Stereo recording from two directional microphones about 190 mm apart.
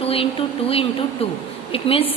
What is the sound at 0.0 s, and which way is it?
A woman's voice, 30° left (ahead or behind).